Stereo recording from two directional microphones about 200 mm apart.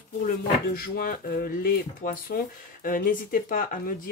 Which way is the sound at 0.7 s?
50° left (ahead or behind).